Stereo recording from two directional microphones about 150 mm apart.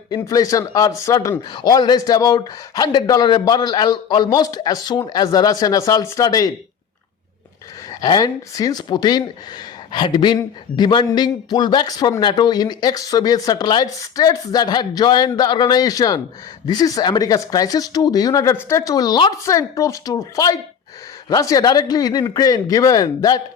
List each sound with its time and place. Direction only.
0.1 s a man's voice: 25° left (ahead or behind)
7.9 s a man's voice: 25° left (ahead or behind)